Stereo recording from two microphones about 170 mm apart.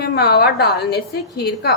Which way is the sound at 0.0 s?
75° left (ahead or behind).